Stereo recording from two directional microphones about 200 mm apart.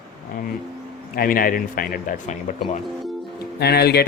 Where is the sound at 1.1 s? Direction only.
45° left (ahead or behind).